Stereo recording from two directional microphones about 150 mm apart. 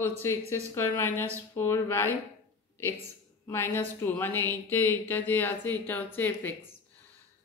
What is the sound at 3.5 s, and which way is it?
A woman's voice, 15° left (ahead or behind).